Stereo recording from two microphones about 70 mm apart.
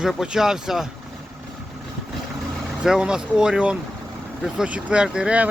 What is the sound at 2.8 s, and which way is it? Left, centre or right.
Speech, centre.